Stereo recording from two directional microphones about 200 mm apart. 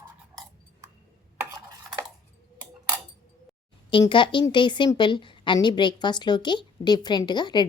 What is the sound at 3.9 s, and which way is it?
A woman's voice, 25° left (ahead or behind).